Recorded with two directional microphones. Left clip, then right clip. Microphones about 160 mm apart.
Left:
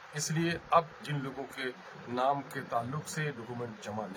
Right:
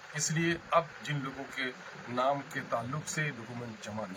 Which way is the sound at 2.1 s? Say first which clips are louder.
Even; 35° left (ahead or behind).